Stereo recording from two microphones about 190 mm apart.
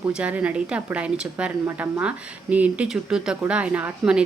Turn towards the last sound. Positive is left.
turn(degrees=-5)  # may be behind; listen again after turning